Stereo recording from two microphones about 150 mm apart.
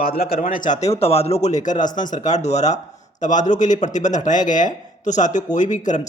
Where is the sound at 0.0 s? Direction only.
80° left.